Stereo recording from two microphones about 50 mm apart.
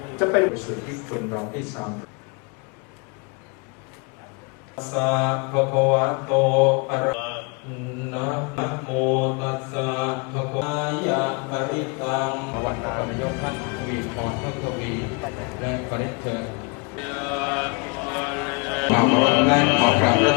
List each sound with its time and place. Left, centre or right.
0.2 s mantra: centre
4.8 s mantra: centre
19.0 s mantra: left